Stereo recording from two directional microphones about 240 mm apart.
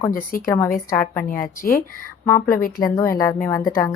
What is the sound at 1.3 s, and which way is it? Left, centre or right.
Speech, left.